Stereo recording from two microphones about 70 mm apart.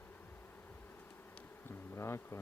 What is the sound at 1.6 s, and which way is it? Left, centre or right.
Bee, left.